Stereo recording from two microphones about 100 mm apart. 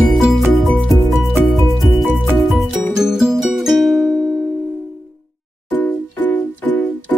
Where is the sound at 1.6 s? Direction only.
Centre (ahead or behind).